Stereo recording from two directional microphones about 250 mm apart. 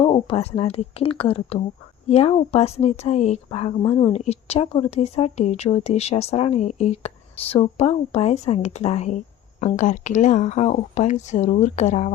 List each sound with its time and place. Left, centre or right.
0.0 s speech: left